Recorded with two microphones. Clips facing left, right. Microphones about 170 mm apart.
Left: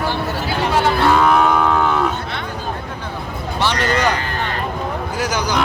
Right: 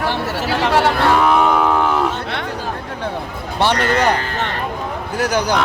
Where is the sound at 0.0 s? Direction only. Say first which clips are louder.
Right 1 dB; 80° right.